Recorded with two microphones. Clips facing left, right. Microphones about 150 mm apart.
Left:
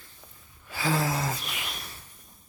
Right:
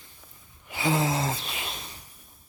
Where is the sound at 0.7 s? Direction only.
20° right (ahead or behind).